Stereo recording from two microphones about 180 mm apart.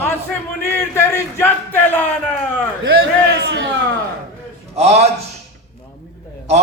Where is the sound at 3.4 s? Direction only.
80° right.